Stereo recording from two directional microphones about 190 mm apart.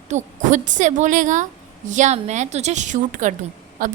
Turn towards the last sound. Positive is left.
turn(degrees=-45)  # may be behind; listen again after turning